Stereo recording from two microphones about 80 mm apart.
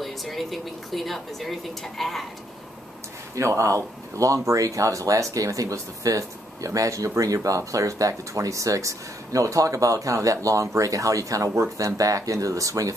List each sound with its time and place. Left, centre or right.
0.0 s a woman's voice: centre
3.3 s speech: right